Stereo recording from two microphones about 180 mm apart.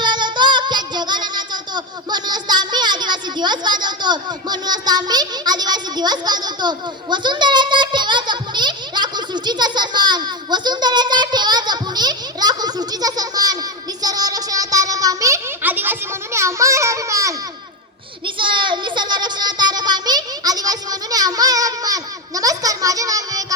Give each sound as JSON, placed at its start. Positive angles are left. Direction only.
{"t": 0.0, "sound": "child singing", "side_deg": -25}
{"t": 18.3, "sound": "a child's voice", "side_deg": -25}